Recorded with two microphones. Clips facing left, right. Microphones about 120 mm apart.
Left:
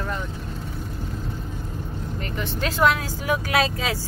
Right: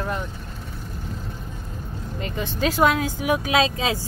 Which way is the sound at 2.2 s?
20° right (ahead or behind).